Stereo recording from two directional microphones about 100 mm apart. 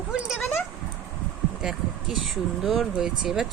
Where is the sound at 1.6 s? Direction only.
Centre (ahead or behind).